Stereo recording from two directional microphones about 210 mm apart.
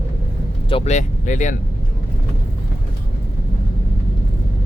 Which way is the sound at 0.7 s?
30° left (ahead or behind).